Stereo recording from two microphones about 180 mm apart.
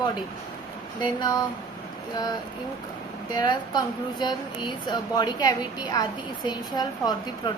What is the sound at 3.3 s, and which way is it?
Speech, 25° left (ahead or behind).